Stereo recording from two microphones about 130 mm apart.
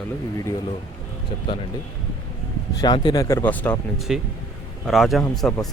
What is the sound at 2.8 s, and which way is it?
Speech, 35° left (ahead or behind).